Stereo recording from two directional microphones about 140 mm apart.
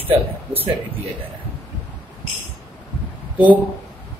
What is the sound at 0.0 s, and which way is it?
Speech, 15° right (ahead or behind).